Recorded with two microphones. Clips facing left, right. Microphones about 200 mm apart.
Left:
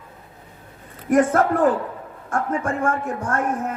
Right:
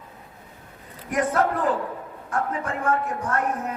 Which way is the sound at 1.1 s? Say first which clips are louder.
Left 6 dB; 50° left (ahead or behind).